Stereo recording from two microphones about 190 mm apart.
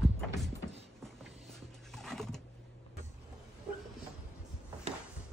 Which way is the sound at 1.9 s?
Centre (ahead or behind).